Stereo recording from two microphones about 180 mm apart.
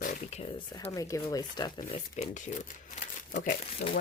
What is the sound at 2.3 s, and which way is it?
Speech, 45° left (ahead or behind).